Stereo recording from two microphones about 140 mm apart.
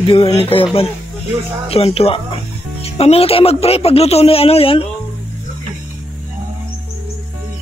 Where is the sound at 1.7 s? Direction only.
45° left (ahead or behind).